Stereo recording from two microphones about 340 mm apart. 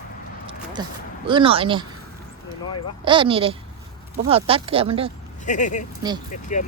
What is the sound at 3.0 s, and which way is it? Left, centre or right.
Speech, centre.